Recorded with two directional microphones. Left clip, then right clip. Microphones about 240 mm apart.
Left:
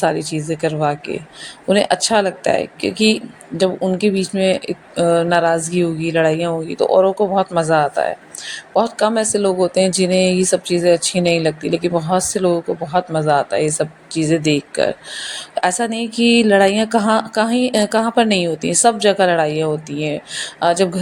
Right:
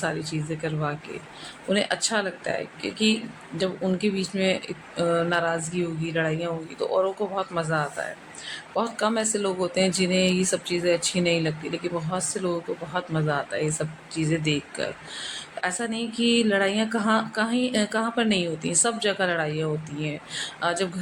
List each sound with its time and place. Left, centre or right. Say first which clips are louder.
0.0 s speech: left 11 dB; left